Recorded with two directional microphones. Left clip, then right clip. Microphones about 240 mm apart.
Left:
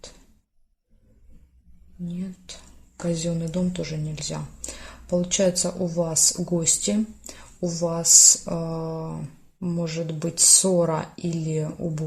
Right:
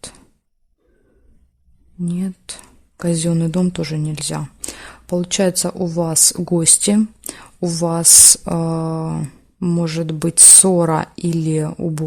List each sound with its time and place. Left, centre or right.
2.1 s speech: right